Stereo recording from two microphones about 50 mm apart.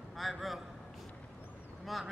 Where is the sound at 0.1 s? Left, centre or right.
Centre.